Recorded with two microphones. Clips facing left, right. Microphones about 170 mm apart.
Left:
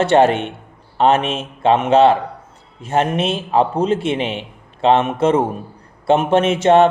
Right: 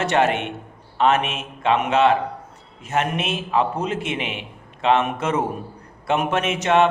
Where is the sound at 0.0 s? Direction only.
30° left (ahead or behind).